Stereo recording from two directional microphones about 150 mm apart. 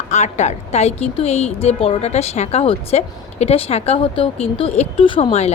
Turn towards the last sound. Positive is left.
turn(degrees=45)  # may be behind; listen again after turning